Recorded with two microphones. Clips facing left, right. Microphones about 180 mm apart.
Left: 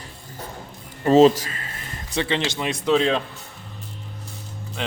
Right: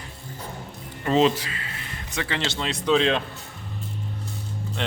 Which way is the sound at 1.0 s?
40° left (ahead or behind).